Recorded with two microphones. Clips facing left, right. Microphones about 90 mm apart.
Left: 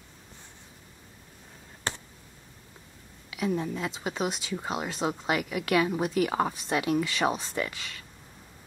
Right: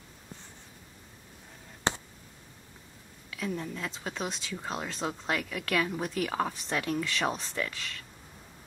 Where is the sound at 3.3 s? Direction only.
15° left (ahead or behind).